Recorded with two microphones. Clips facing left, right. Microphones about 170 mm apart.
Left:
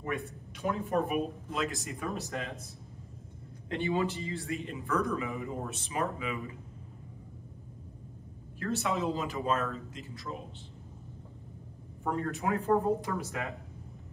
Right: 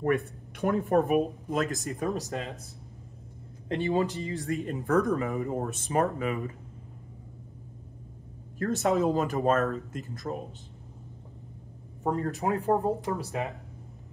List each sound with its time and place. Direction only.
0.0 s speech: 60° right (ahead or behind)
1.1 s speech: 45° right (ahead or behind)
3.6 s speech: 40° right (ahead or behind)
8.5 s speech: 40° right (ahead or behind)
12.0 s speech: 35° right (ahead or behind)